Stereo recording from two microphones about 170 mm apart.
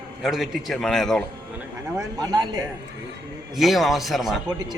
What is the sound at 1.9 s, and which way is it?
Speech, 20° right (ahead or behind).